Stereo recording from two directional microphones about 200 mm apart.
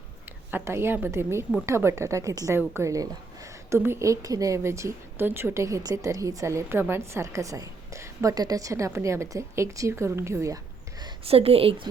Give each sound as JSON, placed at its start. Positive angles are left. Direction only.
{"t": 0.5, "sound": "a woman's voice", "side_deg": -15}
{"t": 11.0, "sound": "a woman's voice", "side_deg": -30}